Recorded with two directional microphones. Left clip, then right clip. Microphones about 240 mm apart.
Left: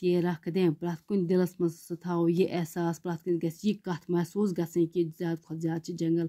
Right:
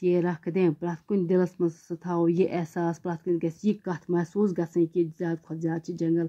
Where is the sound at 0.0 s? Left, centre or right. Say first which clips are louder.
Right 3 dB; left.